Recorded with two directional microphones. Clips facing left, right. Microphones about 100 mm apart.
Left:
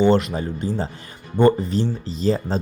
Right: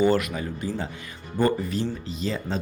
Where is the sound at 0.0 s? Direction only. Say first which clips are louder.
Left 4 dB; 30° left (ahead or behind).